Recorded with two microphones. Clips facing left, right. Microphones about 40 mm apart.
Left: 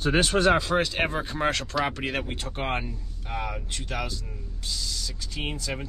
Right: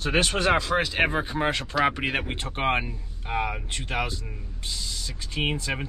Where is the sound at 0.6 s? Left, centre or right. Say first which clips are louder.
Right 1 dB; centre.